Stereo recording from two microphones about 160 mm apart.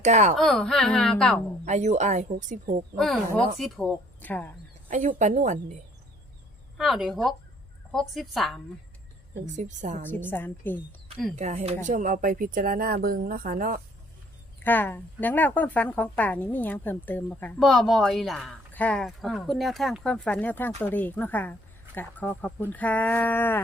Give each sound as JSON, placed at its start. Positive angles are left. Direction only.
{"t": 0.0, "sound": "speech", "side_deg": -45}
{"t": 0.3, "sound": "speech", "side_deg": 5}
{"t": 1.6, "sound": "speech", "side_deg": -45}
{"t": 3.0, "sound": "a woman's voice", "side_deg": 5}
{"t": 4.9, "sound": "speech", "side_deg": -55}
{"t": 6.7, "sound": "speech", "side_deg": 0}
{"t": 9.6, "sound": "speech", "side_deg": -50}
{"t": 10.0, "sound": "a woman's voice", "side_deg": 15}
{"t": 11.3, "sound": "speech", "side_deg": -40}
{"t": 11.9, "sound": "speech", "side_deg": -55}
{"t": 14.6, "sound": "a woman's voice", "side_deg": 10}